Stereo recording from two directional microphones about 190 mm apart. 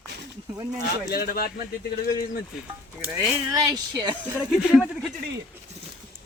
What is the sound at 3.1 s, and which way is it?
Speech, 15° right (ahead or behind).